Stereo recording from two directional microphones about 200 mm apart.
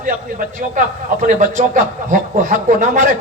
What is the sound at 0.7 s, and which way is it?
A man's voice, 40° right (ahead or behind).